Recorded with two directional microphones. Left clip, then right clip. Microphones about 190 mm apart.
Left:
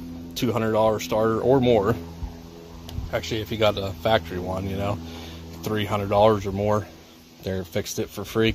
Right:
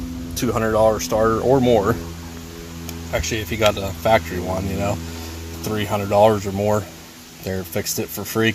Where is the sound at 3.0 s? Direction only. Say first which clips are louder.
Right 4 dB; 15° left (ahead or behind).